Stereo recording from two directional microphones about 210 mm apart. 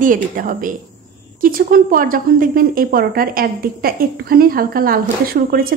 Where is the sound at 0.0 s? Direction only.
40° right (ahead or behind).